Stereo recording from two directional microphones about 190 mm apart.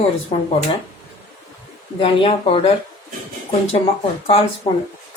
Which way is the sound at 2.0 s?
30° left (ahead or behind).